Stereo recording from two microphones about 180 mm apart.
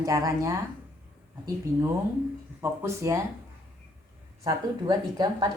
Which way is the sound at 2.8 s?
15° right (ahead or behind).